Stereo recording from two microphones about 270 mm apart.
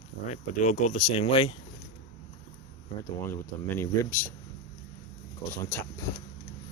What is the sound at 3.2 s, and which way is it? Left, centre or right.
Speech, centre.